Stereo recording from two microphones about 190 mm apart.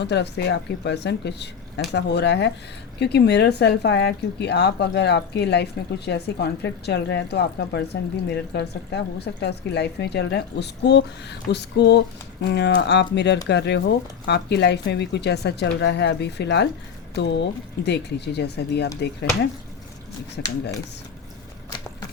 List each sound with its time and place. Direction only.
0.0 s a woman's voice: 65° left (ahead or behind)
20.4 s speech: 65° left (ahead or behind)